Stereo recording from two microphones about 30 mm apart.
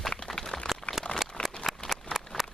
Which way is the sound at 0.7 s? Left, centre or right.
Centre.